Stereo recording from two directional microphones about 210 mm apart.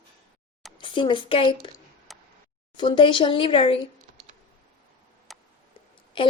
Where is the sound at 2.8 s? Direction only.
20° left (ahead or behind).